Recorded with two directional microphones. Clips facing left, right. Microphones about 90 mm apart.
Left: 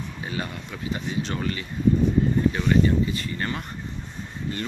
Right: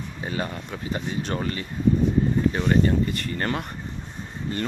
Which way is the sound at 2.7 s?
55° right (ahead or behind).